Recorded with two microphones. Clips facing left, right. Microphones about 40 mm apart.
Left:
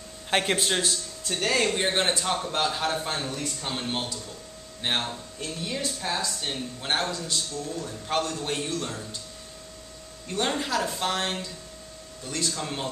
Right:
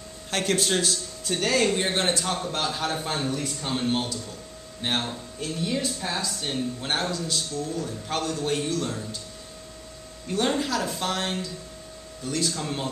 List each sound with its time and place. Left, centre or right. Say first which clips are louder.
0.3 s speech: left 1 dB; left
0.6 s speech: right 1 dB; centre
10.2 s speech: right 3 dB; centre